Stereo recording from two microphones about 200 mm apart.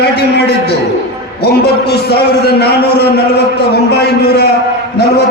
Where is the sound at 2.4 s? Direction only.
50° left (ahead or behind).